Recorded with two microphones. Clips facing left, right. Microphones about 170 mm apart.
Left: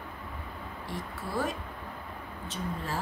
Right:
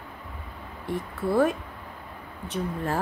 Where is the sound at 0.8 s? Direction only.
60° right (ahead or behind).